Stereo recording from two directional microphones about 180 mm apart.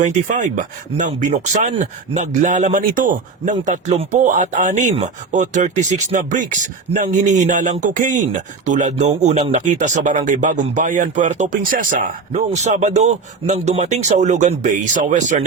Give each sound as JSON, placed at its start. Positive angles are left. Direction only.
{"t": 0.0, "sound": "speech", "side_deg": -45}